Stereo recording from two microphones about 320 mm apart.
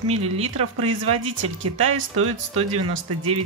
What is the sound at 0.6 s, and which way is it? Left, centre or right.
Speech, right.